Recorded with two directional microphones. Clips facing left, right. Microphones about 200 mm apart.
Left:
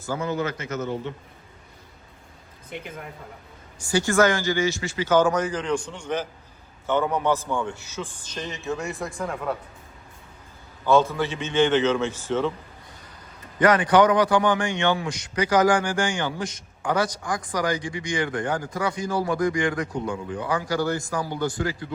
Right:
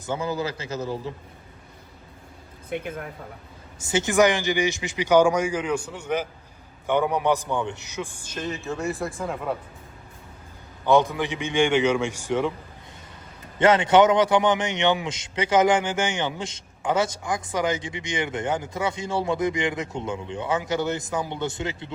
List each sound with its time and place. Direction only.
0.0 s a man's voice: 25° right (ahead or behind)
2.6 s speech: 55° right (ahead or behind)
3.8 s speech: 20° right (ahead or behind); by 9.6 s centre (ahead or behind)
10.8 s speech: 15° right (ahead or behind)
13.6 s a man's voice: 25° right (ahead or behind)